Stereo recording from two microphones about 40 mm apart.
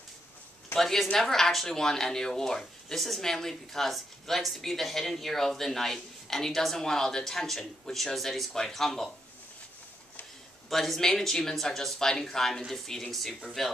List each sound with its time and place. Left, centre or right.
0.7 s a woman's voice: centre
10.7 s a woman's voice: centre